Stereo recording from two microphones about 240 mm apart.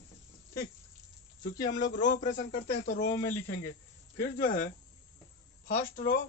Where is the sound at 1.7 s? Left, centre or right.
Left.